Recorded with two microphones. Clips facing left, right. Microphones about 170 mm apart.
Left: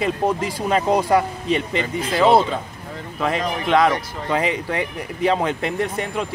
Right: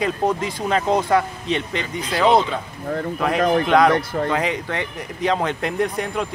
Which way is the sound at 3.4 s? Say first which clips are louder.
Right 7 dB; 55° right (ahead or behind).